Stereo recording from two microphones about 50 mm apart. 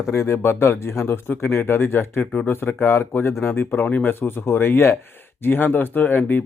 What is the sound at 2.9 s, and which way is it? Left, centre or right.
Speech, left.